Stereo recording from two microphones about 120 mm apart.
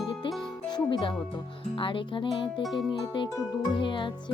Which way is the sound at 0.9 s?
40° left (ahead or behind).